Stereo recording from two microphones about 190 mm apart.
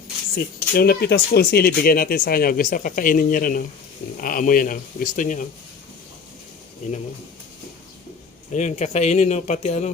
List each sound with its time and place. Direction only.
0.3 s speech: 55° left (ahead or behind)
8.5 s speech: 40° left (ahead or behind)